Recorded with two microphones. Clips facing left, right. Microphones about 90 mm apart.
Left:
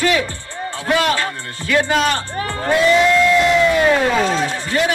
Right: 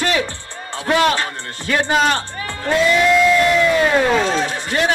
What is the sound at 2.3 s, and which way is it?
Crowd, 40° left (ahead or behind).